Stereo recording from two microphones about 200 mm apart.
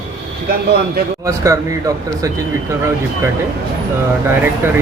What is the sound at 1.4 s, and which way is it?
Speech, 15° right (ahead or behind).